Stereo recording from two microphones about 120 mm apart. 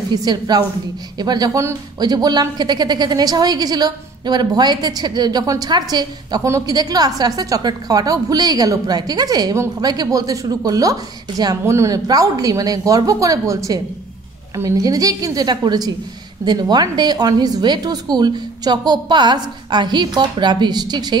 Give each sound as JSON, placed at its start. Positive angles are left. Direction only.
{"t": 0.1, "sound": "a woman's voice", "side_deg": -35}